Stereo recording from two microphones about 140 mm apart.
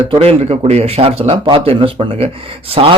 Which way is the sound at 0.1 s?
45° right (ahead or behind).